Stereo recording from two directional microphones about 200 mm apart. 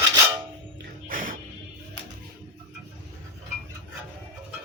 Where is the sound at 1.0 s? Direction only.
45° right (ahead or behind).